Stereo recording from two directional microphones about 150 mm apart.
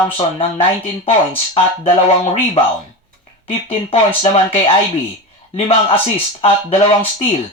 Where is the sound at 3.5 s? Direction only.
40° left (ahead or behind).